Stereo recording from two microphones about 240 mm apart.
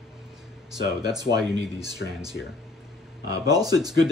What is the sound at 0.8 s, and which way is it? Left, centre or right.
Speech, centre.